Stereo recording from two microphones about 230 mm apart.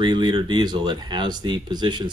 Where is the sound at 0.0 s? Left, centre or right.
Centre.